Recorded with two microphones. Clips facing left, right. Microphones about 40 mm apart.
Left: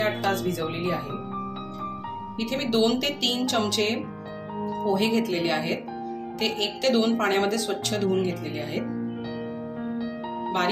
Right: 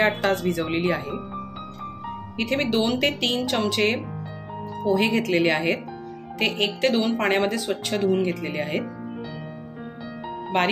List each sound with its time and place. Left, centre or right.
0.0 s speech: right
2.3 s speech: right
3.3 s speech: centre
3.7 s speech: right
5.2 s a woman's voice: right
5.5 s speech: right
6.9 s speech: centre
7.2 s speech: right